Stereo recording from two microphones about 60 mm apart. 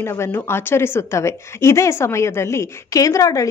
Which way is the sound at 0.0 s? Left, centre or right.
Left.